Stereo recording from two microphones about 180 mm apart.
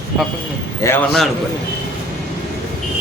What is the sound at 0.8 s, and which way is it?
Speech, 15° left (ahead or behind).